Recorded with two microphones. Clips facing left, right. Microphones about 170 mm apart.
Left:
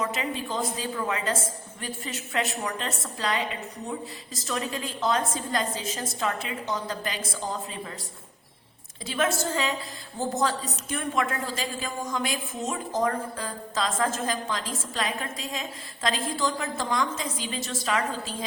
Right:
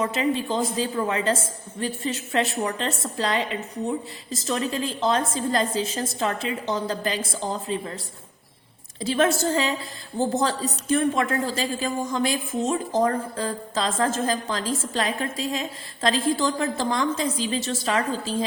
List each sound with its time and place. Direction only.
0.0 s a woman's voice: 30° right (ahead or behind)
9.0 s a woman's voice: 30° right (ahead or behind)